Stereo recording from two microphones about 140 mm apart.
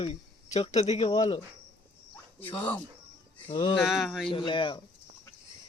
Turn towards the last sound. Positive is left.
turn(degrees=35)  # may be behind; listen again after turning